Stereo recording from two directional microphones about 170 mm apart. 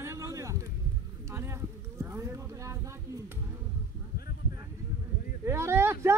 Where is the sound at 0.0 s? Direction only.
15° right (ahead or behind).